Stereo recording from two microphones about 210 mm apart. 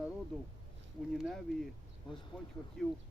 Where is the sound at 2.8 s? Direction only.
Centre (ahead or behind).